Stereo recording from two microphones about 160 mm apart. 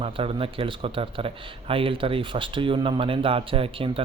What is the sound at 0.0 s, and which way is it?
Speech, 35° right (ahead or behind).